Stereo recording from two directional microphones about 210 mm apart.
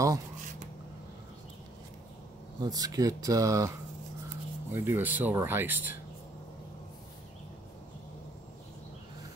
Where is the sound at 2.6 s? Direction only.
20° right (ahead or behind).